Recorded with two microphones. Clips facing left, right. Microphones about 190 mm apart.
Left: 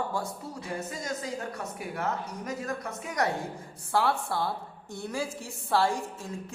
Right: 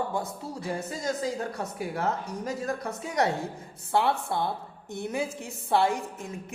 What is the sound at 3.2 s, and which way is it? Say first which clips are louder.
A woman's voice: right 3 dB; 25° right (ahead or behind).